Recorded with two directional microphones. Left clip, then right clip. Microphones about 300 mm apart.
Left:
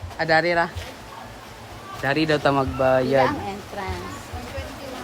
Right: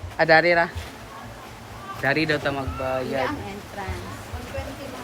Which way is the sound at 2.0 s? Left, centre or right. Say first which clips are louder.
Left 2 dB; centre.